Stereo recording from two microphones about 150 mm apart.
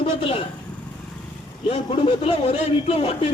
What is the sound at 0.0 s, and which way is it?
Speech, 35° left (ahead or behind).